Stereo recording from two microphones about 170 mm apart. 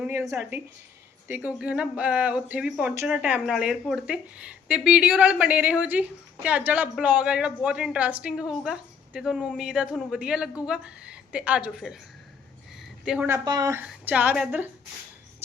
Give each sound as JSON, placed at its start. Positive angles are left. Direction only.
{"t": 0.0, "sound": "a woman's voice", "side_deg": -15}